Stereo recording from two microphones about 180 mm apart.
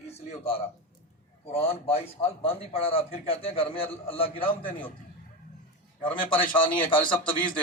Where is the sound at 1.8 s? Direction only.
30° left (ahead or behind).